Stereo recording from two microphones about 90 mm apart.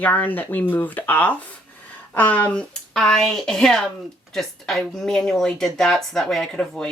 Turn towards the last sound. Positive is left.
turn(degrees=10)  # may be behind; listen again after turning